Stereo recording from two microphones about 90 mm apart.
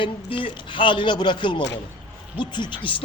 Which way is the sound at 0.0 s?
70° left (ahead or behind).